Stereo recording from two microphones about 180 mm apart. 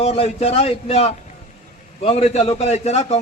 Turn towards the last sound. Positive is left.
turn(degrees=35)  # may be behind; listen again after turning